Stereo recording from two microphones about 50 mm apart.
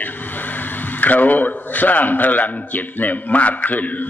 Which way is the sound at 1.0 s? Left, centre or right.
Left.